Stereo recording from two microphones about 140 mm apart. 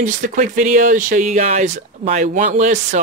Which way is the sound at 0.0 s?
65° right (ahead or behind).